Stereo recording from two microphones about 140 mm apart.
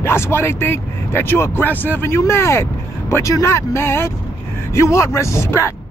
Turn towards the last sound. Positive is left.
turn(degrees=20)  # may be behind; listen again after turning